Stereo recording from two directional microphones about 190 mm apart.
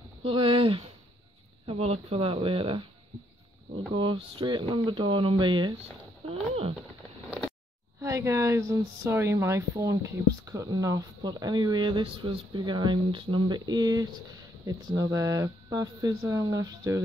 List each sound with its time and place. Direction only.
0.2 s speech: 25° right (ahead or behind)
7.2 s a sound: 5° right (ahead or behind)
8.0 s speech: 15° right (ahead or behind)